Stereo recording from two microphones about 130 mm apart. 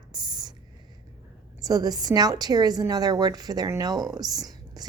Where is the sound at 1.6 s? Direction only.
30° right (ahead or behind).